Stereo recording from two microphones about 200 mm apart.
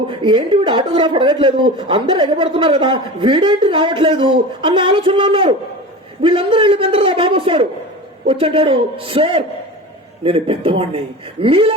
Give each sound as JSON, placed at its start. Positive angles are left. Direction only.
{"t": 0.1, "sound": "speech", "side_deg": -25}